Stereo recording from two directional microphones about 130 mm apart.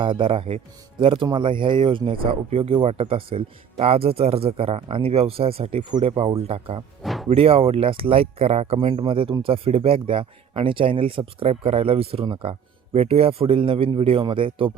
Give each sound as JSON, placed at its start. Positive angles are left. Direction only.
{"t": 0.0, "sound": "speech", "side_deg": -40}
{"t": 7.0, "sound": "a sound", "side_deg": 0}
{"t": 7.3, "sound": "speech", "side_deg": -50}